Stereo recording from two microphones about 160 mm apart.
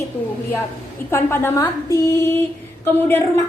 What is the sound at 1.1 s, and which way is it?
A woman's voice, 15° left (ahead or behind).